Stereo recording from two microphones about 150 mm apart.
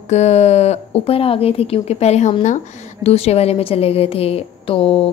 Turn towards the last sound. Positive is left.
turn(degrees=40)  # may be behind; listen again after turning